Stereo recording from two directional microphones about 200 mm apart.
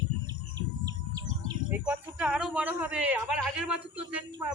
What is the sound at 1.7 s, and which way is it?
Speech, 10° right (ahead or behind).